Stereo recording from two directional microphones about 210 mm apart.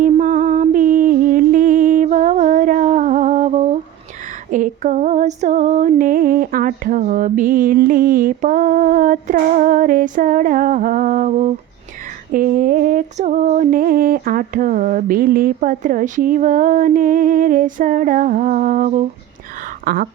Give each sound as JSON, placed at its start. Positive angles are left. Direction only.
{"t": 0.0, "sound": "a sound", "side_deg": -40}
{"t": 4.5, "sound": "female singing", "side_deg": -40}
{"t": 19.8, "sound": "speech", "side_deg": -45}